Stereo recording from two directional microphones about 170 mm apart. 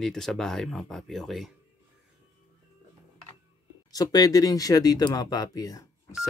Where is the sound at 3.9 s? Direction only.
20° left (ahead or behind).